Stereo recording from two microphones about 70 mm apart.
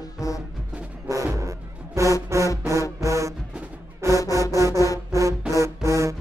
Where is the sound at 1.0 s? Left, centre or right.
Right.